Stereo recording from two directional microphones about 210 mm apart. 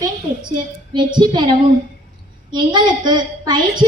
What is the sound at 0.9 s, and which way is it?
A woman's voice, 20° right (ahead or behind).